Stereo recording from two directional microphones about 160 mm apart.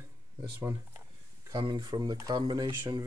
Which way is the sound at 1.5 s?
30° right (ahead or behind).